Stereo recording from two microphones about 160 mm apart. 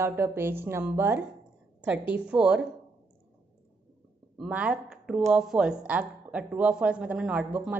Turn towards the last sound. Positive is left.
turn(degrees=-10)  # may be behind; listen again after turning